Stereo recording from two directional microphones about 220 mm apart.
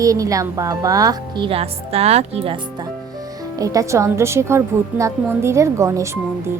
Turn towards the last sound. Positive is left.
turn(degrees=-15)  # may be behind; listen again after turning